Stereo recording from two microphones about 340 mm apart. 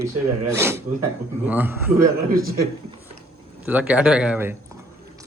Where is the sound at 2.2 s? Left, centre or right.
Right.